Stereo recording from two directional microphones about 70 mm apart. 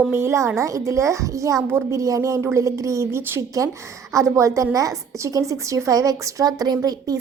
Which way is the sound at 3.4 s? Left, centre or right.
Right.